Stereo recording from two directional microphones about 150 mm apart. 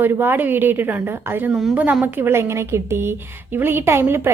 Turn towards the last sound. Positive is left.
turn(degrees=-15)  # may be behind; listen again after turning